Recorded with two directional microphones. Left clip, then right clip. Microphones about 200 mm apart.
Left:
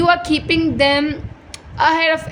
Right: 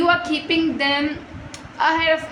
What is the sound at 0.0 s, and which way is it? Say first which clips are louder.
A woman's voice: left 3 dB; 55° left (ahead or behind).